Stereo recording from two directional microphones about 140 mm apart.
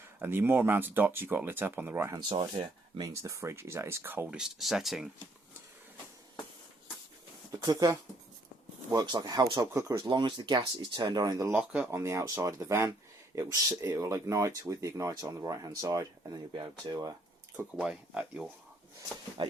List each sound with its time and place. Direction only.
0.2 s speech: 15° right (ahead or behind)
2.1 s speech: 30° right (ahead or behind); by 5.0 s centre (ahead or behind)
7.6 s speech: 25° right (ahead or behind)
17.7 s speech: 10° right (ahead or behind)
19.4 s speech: 35° right (ahead or behind)